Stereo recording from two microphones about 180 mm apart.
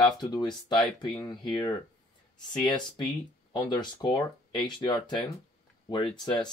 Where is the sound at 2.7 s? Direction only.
25° left (ahead or behind).